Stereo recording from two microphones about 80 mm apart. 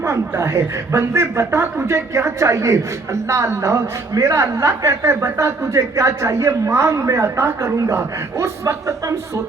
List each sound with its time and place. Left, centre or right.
0.0 s speech: right